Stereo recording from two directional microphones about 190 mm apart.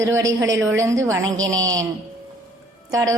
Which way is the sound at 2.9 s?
15° right (ahead or behind).